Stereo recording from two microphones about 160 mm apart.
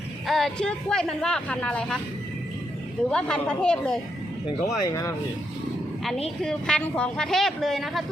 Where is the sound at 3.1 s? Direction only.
5° left (ahead or behind).